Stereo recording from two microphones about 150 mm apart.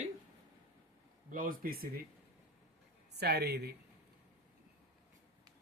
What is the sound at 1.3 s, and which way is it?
Speech, 70° right (ahead or behind).